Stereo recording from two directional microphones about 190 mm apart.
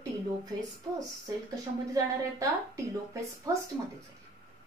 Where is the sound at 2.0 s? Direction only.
20° right (ahead or behind).